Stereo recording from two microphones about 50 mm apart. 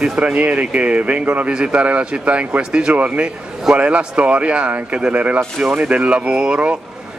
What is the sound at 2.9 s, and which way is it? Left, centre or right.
Speech, right.